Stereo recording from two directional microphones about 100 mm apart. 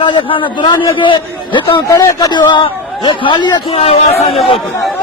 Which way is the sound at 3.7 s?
85° left.